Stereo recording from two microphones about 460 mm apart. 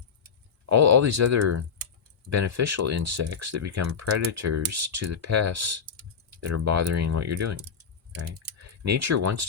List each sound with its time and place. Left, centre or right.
0.6 s speech: right